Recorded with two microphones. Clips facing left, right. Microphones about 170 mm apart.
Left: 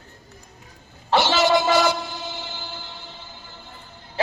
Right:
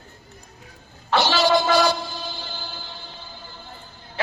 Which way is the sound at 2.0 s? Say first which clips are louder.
Even; 20° left (ahead or behind).